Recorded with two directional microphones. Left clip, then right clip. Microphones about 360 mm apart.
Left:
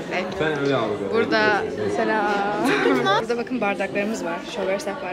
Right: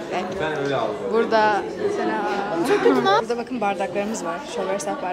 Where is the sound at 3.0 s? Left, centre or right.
Right.